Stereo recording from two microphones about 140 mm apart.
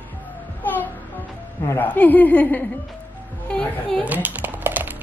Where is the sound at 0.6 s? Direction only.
15° left (ahead or behind).